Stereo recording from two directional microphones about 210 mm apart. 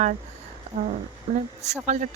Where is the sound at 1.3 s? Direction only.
30° right (ahead or behind).